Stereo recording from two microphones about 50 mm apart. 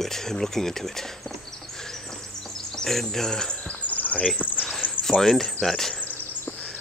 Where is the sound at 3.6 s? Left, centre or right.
Left.